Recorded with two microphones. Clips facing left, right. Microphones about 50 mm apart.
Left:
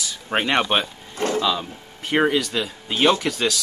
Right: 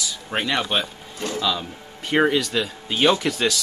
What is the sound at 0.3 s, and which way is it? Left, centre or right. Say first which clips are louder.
Speech: left 3 dB; left.